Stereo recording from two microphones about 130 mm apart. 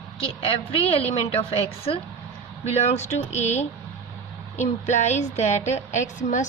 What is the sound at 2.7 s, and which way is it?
A woman's voice, 60° left (ahead or behind).